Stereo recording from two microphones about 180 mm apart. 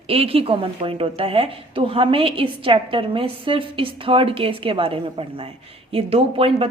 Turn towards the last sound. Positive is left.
turn(degrees=-30)  # may be behind; listen again after turning